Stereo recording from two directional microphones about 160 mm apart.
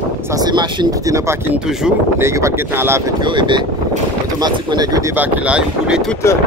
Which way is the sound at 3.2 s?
30° right (ahead or behind).